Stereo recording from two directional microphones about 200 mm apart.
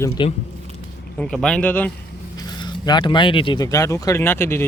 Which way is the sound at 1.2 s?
5° left (ahead or behind).